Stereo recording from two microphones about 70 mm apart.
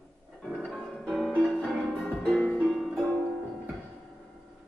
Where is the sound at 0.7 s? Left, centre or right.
Centre.